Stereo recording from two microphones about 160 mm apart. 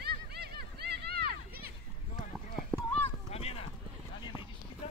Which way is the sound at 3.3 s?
40° left (ahead or behind).